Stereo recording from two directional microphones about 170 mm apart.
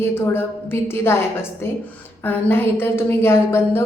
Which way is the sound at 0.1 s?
15° left (ahead or behind).